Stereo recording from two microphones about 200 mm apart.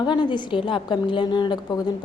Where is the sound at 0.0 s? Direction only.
20° left (ahead or behind).